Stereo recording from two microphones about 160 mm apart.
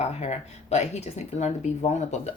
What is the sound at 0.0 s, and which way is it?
Speech, 45° left (ahead or behind).